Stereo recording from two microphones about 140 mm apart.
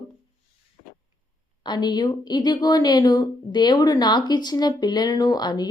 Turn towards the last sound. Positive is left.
turn(degrees=30)  # may be behind; listen again after turning